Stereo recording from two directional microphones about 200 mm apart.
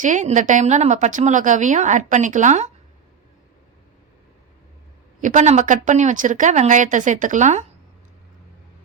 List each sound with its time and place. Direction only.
0.0 s a woman's voice: 40° right (ahead or behind)
5.2 s a woman's voice: 35° right (ahead or behind)